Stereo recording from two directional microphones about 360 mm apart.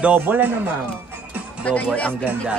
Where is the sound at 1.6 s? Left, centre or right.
Centre.